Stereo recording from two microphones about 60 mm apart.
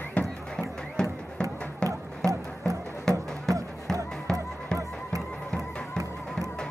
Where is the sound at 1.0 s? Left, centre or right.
Centre.